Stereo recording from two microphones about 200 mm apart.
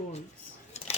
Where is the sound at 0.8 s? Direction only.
35° left (ahead or behind).